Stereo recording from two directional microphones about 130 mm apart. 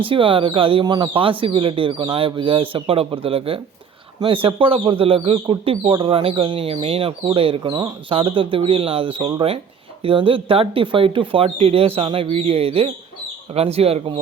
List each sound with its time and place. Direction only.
0.0 s speech: 40° right (ahead or behind)